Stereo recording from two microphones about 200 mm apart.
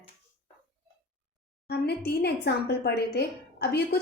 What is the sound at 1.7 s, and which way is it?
A woman's voice, 55° left (ahead or behind).